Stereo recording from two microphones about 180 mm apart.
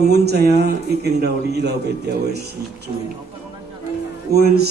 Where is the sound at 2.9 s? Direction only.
35° right (ahead or behind).